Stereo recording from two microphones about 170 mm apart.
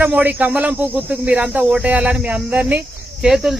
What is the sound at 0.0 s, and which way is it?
Speech, 10° right (ahead or behind).